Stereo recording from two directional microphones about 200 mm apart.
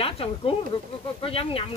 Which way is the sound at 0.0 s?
25° left (ahead or behind).